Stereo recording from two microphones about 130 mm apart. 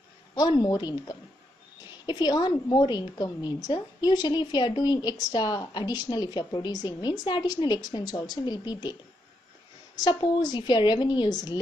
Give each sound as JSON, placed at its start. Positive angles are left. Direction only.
{"t": 0.3, "sound": "a woman's voice", "side_deg": 30}
{"t": 9.9, "sound": "a woman's voice", "side_deg": 30}